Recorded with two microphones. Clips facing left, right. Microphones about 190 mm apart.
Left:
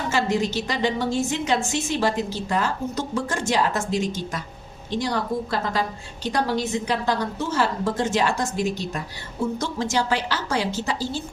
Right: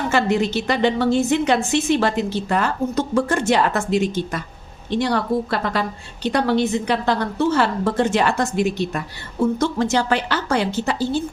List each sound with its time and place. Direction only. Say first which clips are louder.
0.1 s a woman's voice: right 3 dB; 60° right (ahead or behind)